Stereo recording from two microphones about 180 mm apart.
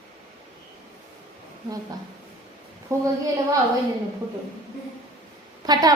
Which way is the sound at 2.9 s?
15° right (ahead or behind).